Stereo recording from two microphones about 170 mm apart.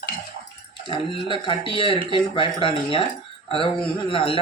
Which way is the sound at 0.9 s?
30° left (ahead or behind).